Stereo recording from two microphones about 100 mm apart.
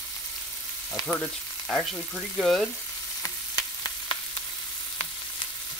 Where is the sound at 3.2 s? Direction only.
35° left (ahead or behind).